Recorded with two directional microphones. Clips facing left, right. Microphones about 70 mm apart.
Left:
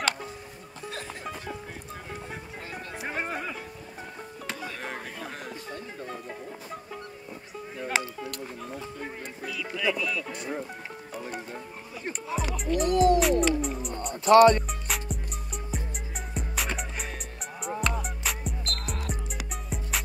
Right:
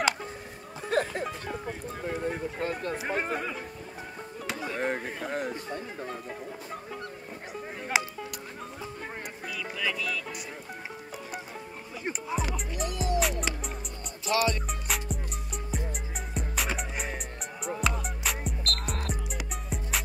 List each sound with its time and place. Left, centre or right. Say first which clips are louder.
0.8 s music: right 10 dB; right
3.0 s a sound: right 2 dB; centre
4.5 s music: right 2 dB; centre
5.3 s music: right 6 dB; right
7.9 s a sound: right 1 dB; centre
9.6 s music: left 1 dB; centre
12.0 s music: even; centre
12.9 s music: left 11 dB; left
13.2 s music: left 7 dB; centre
14.2 s speech: left 11 dB; left
14.7 s music: even; centre